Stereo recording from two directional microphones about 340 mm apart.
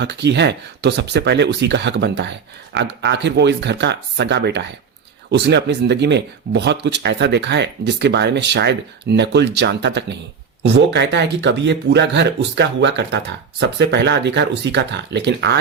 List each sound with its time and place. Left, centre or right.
0.0 s speech: right